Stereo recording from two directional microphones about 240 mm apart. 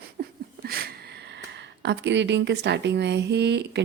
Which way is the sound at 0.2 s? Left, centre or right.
Right.